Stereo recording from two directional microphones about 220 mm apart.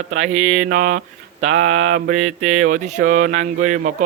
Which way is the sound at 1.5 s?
60° right (ahead or behind).